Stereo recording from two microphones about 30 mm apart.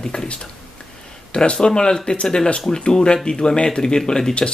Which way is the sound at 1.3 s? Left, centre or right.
Left.